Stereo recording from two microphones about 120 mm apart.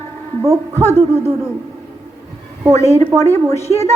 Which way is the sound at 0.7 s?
20° left (ahead or behind).